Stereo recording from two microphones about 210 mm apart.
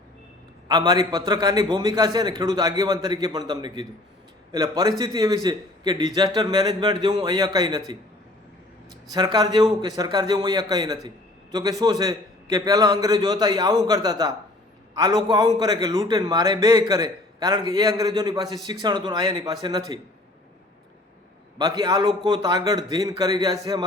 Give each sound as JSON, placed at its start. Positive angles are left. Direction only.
{"t": 0.7, "sound": "a man's voice", "side_deg": -20}
{"t": 9.1, "sound": "a man's voice", "side_deg": -20}
{"t": 21.6, "sound": "a man's voice", "side_deg": -20}